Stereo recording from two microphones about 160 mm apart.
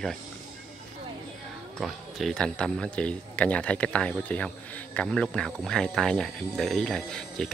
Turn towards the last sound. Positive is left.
turn(degrees=5)  # may be behind; listen again after turning